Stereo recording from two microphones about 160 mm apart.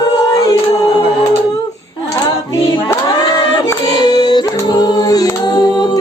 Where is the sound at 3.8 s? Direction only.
25° left (ahead or behind).